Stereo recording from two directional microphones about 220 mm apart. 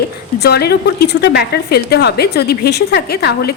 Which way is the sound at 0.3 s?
50° left (ahead or behind).